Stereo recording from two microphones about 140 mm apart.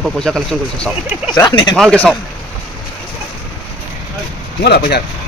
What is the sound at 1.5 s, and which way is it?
Speech, 35° left (ahead or behind).